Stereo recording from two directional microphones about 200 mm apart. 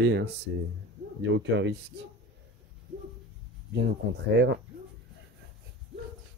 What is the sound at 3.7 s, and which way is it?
Speech, 55° right (ahead or behind).